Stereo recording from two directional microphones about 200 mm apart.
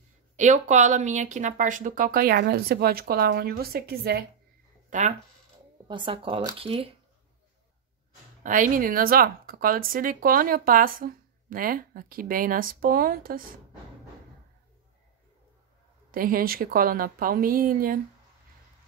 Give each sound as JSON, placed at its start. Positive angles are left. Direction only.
{"t": 0.4, "sound": "speech", "side_deg": -35}
{"t": 4.8, "sound": "a sound", "side_deg": -40}
{"t": 5.9, "sound": "speech", "side_deg": -25}
{"t": 8.5, "sound": "speech", "side_deg": -40}
{"t": 16.1, "sound": "speech", "side_deg": -45}